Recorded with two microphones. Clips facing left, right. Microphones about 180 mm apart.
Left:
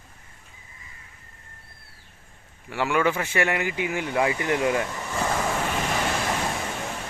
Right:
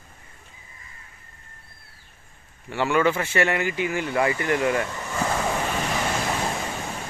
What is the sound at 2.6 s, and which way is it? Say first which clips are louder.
Speech: right 2 dB; 10° left (ahead or behind).